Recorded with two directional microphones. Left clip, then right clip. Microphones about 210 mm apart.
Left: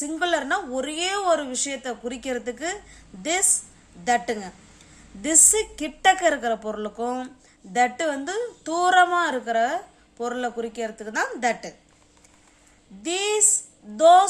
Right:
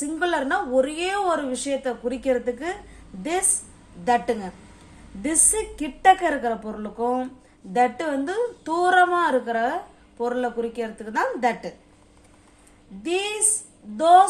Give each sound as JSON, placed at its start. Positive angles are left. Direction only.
{"t": 0.0, "sound": "a woman's voice", "side_deg": 25}
{"t": 4.0, "sound": "a woman's voice", "side_deg": 25}
{"t": 13.0, "sound": "a woman's voice", "side_deg": 30}